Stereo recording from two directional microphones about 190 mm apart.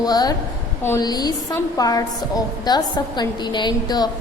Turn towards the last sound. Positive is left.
turn(degrees=20)  # may be behind; listen again after turning